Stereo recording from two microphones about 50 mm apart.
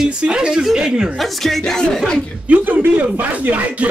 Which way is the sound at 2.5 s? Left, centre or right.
Right.